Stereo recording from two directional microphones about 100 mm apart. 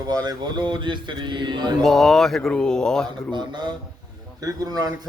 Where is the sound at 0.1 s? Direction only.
40° right (ahead or behind).